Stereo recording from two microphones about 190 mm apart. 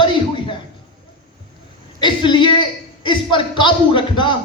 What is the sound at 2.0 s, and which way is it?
A man's voice, 25° left (ahead or behind).